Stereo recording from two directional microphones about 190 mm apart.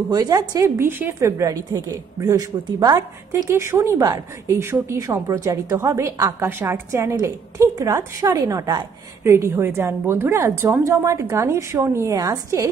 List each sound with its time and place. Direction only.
0.1 s a woman's voice: 20° right (ahead or behind)